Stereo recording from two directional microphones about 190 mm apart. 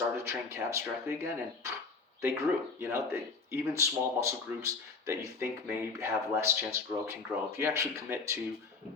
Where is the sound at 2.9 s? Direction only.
15° right (ahead or behind).